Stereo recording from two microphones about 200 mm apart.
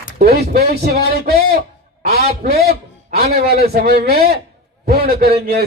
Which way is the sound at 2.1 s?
50° right (ahead or behind).